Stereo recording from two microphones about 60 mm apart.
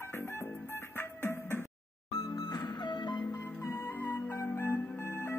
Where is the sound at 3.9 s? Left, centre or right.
Left.